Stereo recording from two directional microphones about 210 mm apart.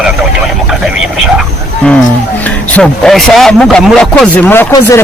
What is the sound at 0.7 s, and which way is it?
Vehicle, centre (ahead or behind).